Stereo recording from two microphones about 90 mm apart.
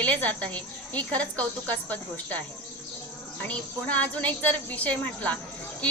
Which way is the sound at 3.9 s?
15° left (ahead or behind).